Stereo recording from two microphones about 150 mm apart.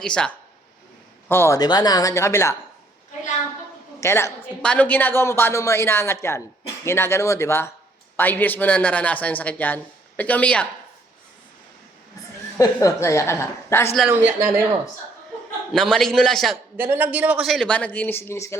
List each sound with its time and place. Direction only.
0.0 s speech: 5° left (ahead or behind)
1.3 s a woman's voice: 15° left (ahead or behind)
4.0 s speech: 15° left (ahead or behind)
12.5 s a woman's voice: 20° left (ahead or behind)
14.1 s a woman's voice: 15° right (ahead or behind)
15.7 s a man's voice: 5° left (ahead or behind)
16.7 s a man's voice: 15° right (ahead or behind); by 18.5 s 20° left (ahead or behind)